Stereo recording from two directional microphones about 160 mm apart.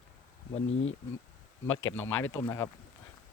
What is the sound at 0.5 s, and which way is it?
Speech, 40° left (ahead or behind).